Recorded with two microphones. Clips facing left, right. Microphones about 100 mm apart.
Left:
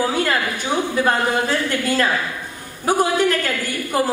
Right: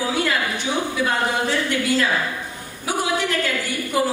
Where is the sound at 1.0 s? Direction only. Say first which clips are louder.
Left 3 dB; 45° left (ahead or behind).